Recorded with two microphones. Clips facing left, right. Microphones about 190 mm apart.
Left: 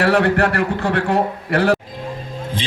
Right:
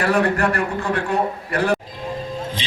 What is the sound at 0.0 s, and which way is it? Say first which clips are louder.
A man's voice: left 3 dB; 70° left (ahead or behind).